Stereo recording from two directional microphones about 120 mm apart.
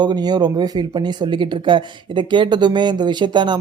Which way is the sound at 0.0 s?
35° right (ahead or behind).